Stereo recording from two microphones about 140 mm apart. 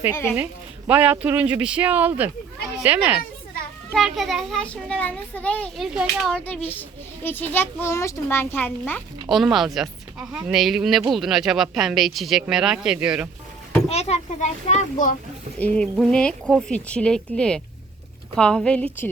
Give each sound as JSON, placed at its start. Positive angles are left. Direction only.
{"t": 0.1, "sound": "a woman's voice", "side_deg": 20}
{"t": 0.9, "sound": "speech", "side_deg": -10}
{"t": 3.9, "sound": "a child's voice", "side_deg": 0}
{"t": 5.7, "sound": "speech", "side_deg": -5}
{"t": 6.4, "sound": "a child's voice", "side_deg": 10}
{"t": 9.3, "sound": "speech", "side_deg": 0}
{"t": 13.8, "sound": "a child's voice", "side_deg": 50}
{"t": 15.5, "sound": "a child's voice", "side_deg": 10}